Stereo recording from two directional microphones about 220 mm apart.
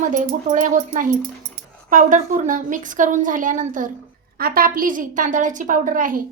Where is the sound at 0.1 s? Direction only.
35° right (ahead or behind).